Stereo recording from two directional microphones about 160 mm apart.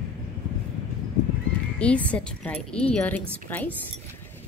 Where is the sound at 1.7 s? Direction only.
10° left (ahead or behind).